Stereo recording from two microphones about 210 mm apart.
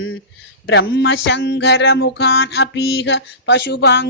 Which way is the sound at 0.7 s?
55° left (ahead or behind).